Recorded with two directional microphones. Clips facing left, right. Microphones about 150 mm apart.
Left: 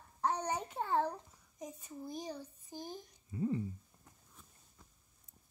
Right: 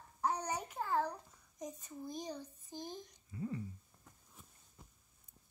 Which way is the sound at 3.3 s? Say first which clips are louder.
Left 7 dB; 25° left (ahead or behind).